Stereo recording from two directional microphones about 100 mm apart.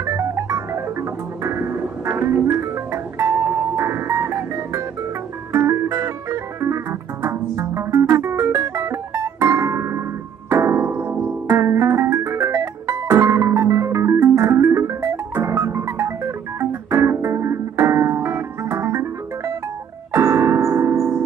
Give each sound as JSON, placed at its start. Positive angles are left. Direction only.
{"t": 0.0, "sound": "music", "side_deg": -30}
{"t": 20.1, "sound": "piano", "side_deg": -30}